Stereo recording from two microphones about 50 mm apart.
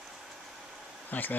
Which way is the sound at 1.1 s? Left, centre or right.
Left.